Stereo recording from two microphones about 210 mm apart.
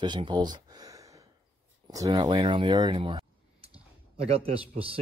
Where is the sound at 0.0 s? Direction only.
20° right (ahead or behind).